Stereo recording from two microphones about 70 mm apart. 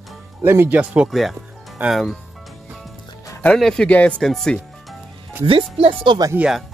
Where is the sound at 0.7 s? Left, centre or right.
Centre.